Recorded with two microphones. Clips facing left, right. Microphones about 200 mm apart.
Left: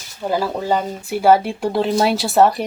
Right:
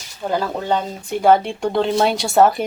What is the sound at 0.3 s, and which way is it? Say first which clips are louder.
Speech: left 1 dB; 5° left (ahead or behind).